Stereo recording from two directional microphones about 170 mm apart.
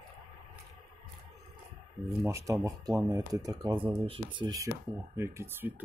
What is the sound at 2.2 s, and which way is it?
Speech, 20° right (ahead or behind).